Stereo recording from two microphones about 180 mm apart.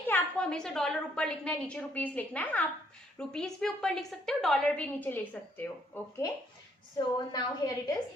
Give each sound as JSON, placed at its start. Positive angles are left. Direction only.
{"t": 0.1, "sound": "a woman's voice", "side_deg": 5}